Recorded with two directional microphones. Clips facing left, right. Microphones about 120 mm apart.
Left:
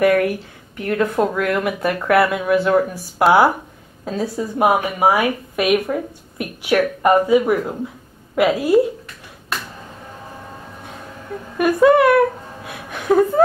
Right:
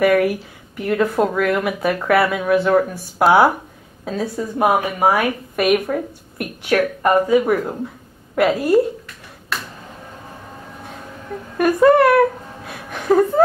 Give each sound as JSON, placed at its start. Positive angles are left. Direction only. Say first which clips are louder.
{"t": 0.0, "sound": "speech", "louder": "even", "side_deg": 0}
{"t": 11.5, "sound": "speech", "louder": "even", "side_deg": 5}